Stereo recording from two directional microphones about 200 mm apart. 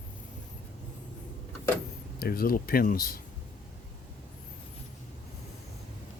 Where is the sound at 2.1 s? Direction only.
50° left (ahead or behind).